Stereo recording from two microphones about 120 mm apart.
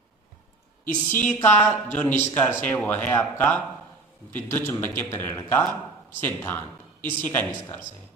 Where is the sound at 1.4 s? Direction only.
15° left (ahead or behind).